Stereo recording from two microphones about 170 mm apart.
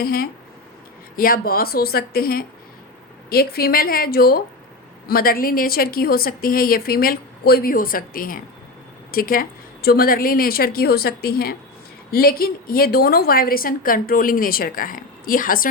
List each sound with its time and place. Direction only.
0.0 s a woman's voice: 60° left (ahead or behind)